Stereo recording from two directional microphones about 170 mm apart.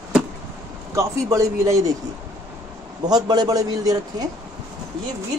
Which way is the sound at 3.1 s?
25° right (ahead or behind).